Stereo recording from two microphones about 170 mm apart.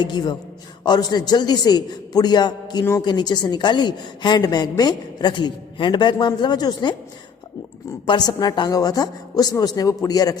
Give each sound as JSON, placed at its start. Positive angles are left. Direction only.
{"t": 0.0, "sound": "a man's voice", "side_deg": 25}